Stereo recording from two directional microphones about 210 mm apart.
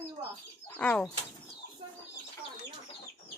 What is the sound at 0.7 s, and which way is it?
Speech, 5° left (ahead or behind).